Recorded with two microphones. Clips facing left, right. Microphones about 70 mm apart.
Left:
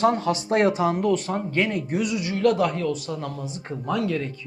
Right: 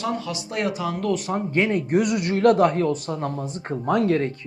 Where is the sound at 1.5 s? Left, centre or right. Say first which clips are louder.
Right 3 dB; right.